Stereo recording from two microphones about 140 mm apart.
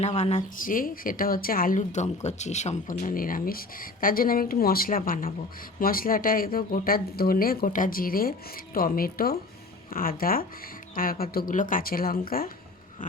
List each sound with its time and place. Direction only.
0.0 s a woman's voice: 50° left (ahead or behind)
0.5 s speech: 75° left (ahead or behind)